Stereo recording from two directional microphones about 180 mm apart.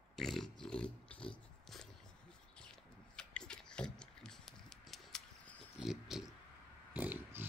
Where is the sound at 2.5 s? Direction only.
5° left (ahead or behind).